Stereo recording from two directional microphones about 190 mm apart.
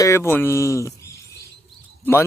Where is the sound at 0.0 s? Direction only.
15° left (ahead or behind).